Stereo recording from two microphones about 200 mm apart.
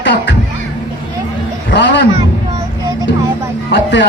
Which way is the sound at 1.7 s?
60° left (ahead or behind).